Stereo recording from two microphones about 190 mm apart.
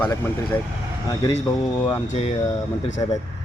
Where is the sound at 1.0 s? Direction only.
25° left (ahead or behind).